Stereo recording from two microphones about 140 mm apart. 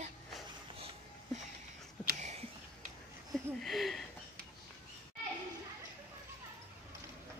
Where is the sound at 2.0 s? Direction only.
10° left (ahead or behind).